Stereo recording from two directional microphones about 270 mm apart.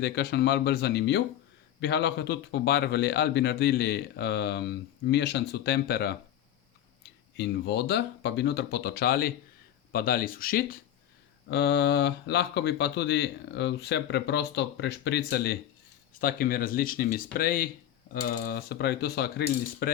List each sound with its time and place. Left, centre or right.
0.0 s speech: left
7.3 s speech: left